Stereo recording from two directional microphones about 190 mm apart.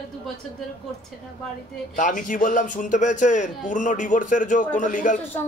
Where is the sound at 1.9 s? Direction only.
45° left (ahead or behind).